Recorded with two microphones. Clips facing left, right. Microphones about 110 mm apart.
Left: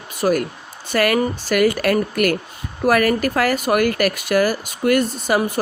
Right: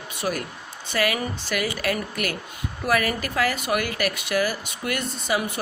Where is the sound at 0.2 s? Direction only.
45° left (ahead or behind).